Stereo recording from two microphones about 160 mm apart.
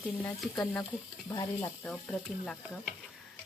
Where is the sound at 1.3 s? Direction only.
25° left (ahead or behind).